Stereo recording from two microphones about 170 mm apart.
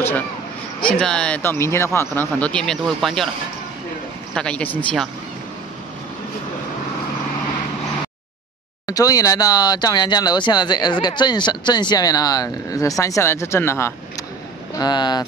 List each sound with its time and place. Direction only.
0.7 s speech: 5° left (ahead or behind)
4.3 s speech: 5° left (ahead or behind)
8.8 s speech: 20° left (ahead or behind)